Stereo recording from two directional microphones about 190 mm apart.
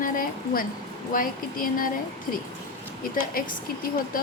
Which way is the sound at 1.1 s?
45° left (ahead or behind).